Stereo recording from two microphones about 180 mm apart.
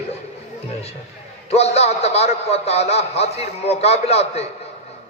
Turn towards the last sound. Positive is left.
turn(degrees=35)  # may be behind; listen again after turning